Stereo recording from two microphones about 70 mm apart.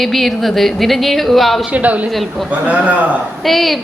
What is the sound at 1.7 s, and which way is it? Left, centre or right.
A man's voice, right.